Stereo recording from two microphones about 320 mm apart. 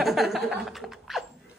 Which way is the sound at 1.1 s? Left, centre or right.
Centre.